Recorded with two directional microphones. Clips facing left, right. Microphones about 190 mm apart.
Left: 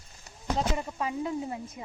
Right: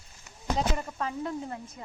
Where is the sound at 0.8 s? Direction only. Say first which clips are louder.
Left 2 dB; 10° left (ahead or behind).